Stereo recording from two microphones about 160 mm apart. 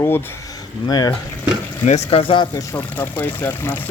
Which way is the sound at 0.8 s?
25° left (ahead or behind).